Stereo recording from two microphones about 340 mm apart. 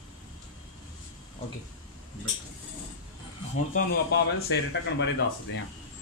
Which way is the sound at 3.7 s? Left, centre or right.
Left.